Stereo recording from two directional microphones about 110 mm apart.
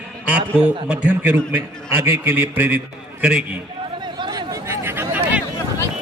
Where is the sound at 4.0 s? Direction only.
40° right (ahead or behind); by 5.4 s 15° right (ahead or behind).